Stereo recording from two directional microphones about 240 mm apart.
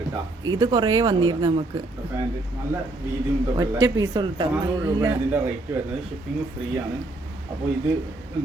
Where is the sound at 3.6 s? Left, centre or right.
Centre.